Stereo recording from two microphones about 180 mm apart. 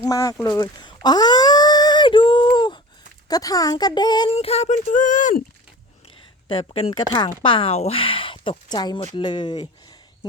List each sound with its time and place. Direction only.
0.0 s a sound: 20° left (ahead or behind)
3.2 s speech: 20° left (ahead or behind)
4.4 s speech: 35° left (ahead or behind)
6.5 s speech: 30° left (ahead or behind)